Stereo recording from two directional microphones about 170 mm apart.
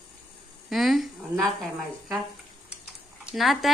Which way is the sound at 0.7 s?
Centre (ahead or behind).